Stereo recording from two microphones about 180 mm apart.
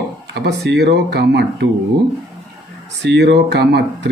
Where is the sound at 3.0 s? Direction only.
70° right (ahead or behind).